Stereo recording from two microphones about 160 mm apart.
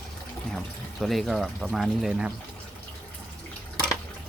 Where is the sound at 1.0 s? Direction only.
Centre (ahead or behind).